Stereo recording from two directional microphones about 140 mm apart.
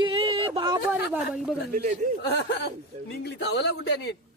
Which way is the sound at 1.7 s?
85° right.